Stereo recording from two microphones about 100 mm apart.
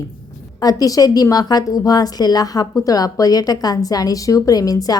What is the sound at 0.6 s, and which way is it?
A woman's voice, 40° left (ahead or behind).